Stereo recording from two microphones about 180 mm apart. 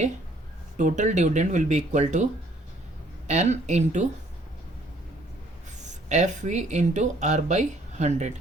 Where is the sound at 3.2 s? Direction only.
40° right (ahead or behind).